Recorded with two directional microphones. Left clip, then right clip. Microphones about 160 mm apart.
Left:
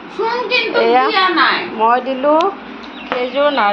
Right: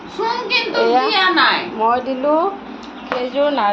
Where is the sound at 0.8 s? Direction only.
5° left (ahead or behind).